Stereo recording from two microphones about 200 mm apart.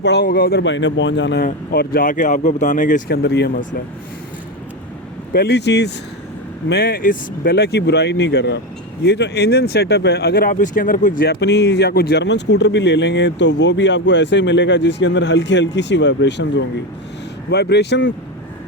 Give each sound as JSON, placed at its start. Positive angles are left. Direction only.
{"t": 0.0, "sound": "speech", "side_deg": 60}
{"t": 1.5, "sound": "speech", "side_deg": 50}
{"t": 3.2, "sound": "speech", "side_deg": 55}
{"t": 5.3, "sound": "speech", "side_deg": 55}